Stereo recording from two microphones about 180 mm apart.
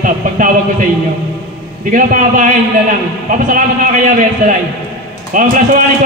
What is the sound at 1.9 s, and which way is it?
Speech, 50° right (ahead or behind).